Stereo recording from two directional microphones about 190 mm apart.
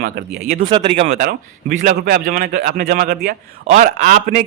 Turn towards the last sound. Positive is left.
turn(degrees=-45)  # may be behind; listen again after turning